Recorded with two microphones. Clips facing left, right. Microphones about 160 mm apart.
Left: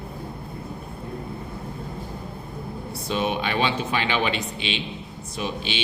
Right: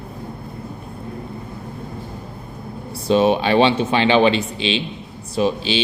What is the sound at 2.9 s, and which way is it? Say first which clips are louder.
Speech: right 10 dB; 30° right (ahead or behind).